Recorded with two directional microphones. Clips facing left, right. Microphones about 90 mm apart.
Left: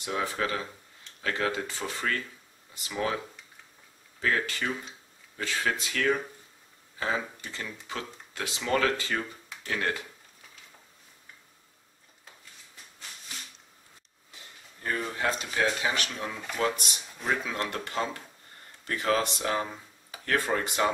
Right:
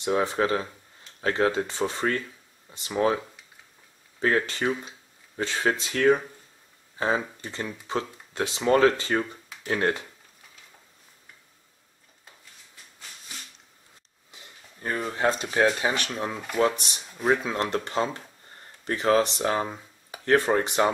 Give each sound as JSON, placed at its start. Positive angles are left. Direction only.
{"t": 0.0, "sound": "speech", "side_deg": -25}
{"t": 4.2, "sound": "speech", "side_deg": -30}
{"t": 14.3, "sound": "a sound", "side_deg": -20}
{"t": 15.2, "sound": "speech", "side_deg": -35}